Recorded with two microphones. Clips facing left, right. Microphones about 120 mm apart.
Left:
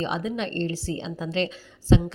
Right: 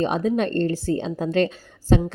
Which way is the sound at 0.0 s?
45° right (ahead or behind).